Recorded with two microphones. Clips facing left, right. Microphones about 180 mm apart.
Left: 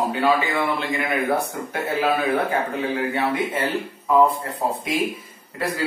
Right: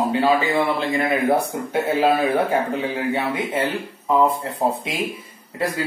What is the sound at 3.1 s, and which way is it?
Speech, 25° right (ahead or behind).